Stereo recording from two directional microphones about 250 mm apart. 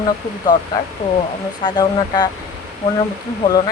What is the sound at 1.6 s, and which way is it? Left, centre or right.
Speech, centre.